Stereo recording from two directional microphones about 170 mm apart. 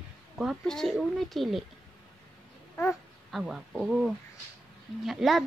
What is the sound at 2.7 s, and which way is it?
Babbling, 10° left (ahead or behind).